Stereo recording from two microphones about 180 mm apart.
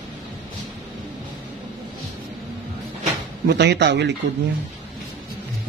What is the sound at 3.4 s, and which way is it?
Speech, 70° right (ahead or behind).